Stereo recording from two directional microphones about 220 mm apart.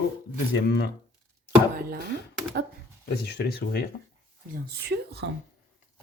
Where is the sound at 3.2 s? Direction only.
50° left (ahead or behind).